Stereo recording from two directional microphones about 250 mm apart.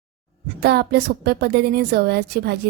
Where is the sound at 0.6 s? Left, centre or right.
Right.